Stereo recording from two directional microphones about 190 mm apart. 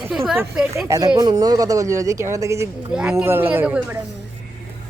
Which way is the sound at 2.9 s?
5° right (ahead or behind).